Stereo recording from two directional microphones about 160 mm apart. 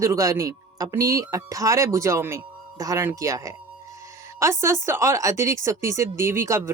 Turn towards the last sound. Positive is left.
turn(degrees=-15)  # may be behind; listen again after turning